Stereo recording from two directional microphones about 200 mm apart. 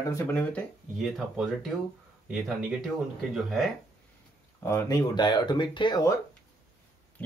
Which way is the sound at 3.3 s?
Centre (ahead or behind).